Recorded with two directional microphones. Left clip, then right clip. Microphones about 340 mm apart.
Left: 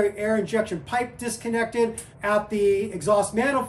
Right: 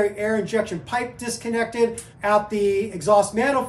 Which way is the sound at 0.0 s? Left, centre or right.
Centre.